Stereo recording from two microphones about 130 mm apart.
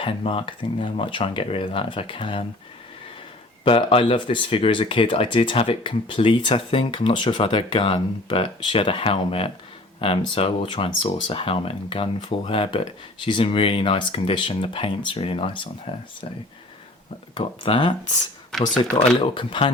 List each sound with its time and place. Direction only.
0.0 s speech: 45° left (ahead or behind)
3.6 s speech: 45° left (ahead or behind)
17.3 s speech: 40° left (ahead or behind)
18.5 s speech: 5° left (ahead or behind)
19.2 s speech: 40° left (ahead or behind)